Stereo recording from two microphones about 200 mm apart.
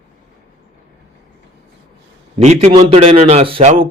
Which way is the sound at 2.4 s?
35° right (ahead or behind).